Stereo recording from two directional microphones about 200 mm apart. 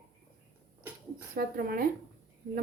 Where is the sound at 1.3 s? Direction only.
50° right (ahead or behind).